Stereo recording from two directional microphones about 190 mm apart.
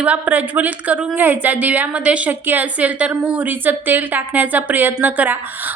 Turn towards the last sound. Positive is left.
turn(degrees=-10)  # may be behind; listen again after turning